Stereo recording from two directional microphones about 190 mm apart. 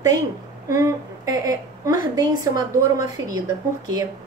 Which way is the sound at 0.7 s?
15° right (ahead or behind).